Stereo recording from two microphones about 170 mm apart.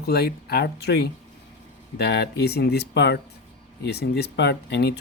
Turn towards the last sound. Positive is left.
turn(degrees=85)